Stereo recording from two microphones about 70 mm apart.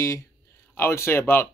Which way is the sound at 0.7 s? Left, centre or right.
Left.